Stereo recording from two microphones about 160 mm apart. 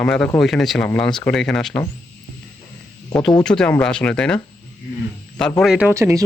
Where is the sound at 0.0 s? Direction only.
5° left (ahead or behind).